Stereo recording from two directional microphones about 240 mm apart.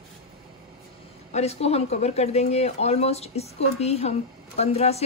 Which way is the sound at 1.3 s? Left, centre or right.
Left.